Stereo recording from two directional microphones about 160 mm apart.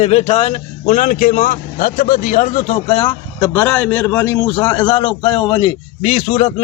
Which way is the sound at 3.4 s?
15° left (ahead or behind).